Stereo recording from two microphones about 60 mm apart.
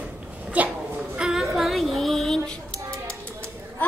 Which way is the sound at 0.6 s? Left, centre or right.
Right.